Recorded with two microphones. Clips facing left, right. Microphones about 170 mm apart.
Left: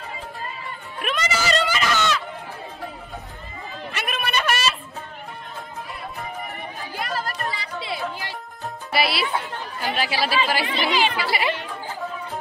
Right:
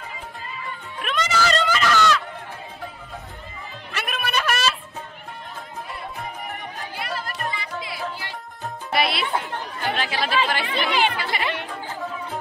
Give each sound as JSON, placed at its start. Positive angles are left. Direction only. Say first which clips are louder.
{"t": 0.9, "sound": "music", "louder": "right 1 dB", "side_deg": 5}
{"t": 3.9, "sound": "a sound", "louder": "even", "side_deg": 0}
{"t": 7.0, "sound": "chatter", "louder": "left 3 dB", "side_deg": 45}
{"t": 7.5, "sound": "chatter", "louder": "left 2 dB", "side_deg": 30}
{"t": 8.9, "sound": "music", "louder": "even", "side_deg": 5}
{"t": 9.9, "sound": "speech", "louder": "left 1 dB", "side_deg": 10}
{"t": 10.8, "sound": "chatter", "louder": "right 1 dB", "side_deg": -55}
{"t": 11.1, "sound": "music", "louder": "left 3 dB", "side_deg": 10}